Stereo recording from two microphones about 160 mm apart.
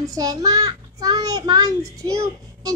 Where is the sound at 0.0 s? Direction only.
20° right (ahead or behind).